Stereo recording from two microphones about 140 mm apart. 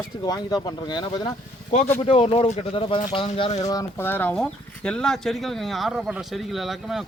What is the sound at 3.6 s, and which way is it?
Speech, 25° left (ahead or behind).